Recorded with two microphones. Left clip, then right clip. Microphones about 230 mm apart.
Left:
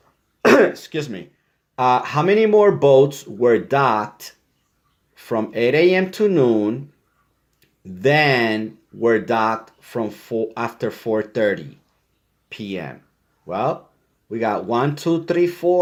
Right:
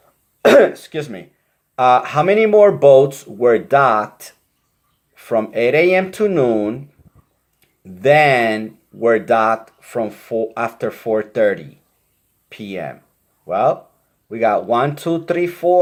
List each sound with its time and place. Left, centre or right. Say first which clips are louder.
0.5 s speech: right 4 dB; left
8.0 s speech: right 4 dB; left